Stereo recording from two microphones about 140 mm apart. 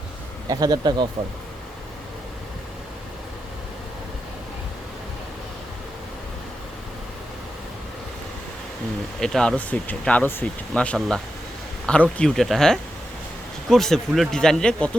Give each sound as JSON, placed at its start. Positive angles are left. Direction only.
{"t": 0.4, "sound": "speech", "side_deg": -30}
{"t": 9.2, "sound": "speech", "side_deg": 5}